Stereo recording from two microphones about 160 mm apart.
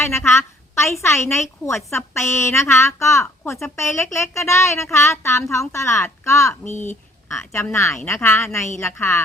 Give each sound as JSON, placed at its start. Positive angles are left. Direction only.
{"t": 0.0, "sound": "a woman's voice", "side_deg": 15}